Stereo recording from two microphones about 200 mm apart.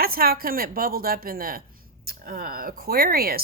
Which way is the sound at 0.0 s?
50° right (ahead or behind).